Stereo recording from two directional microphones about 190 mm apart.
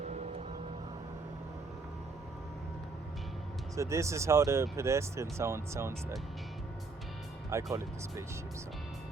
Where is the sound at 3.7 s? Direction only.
15° right (ahead or behind).